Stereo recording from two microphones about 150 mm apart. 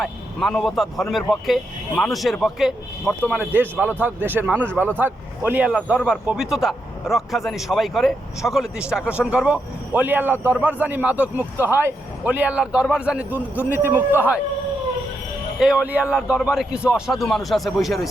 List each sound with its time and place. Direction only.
0.0 s speech: centre (ahead or behind)
3.2 s a man's voice: 10° right (ahead or behind)
15.5 s speech: 5° right (ahead or behind)